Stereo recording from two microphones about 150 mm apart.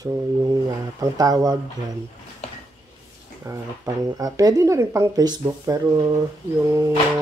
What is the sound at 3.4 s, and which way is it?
Speech, 20° right (ahead or behind).